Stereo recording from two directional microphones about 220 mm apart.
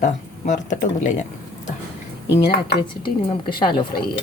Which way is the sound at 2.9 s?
20° left (ahead or behind).